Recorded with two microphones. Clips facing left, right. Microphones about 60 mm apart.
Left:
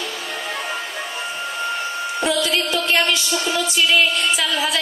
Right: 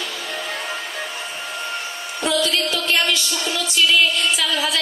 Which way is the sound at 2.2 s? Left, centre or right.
Left.